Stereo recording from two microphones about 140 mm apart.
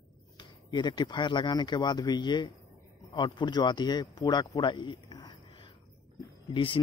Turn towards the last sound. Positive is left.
turn(degrees=35)  # may be behind; listen again after turning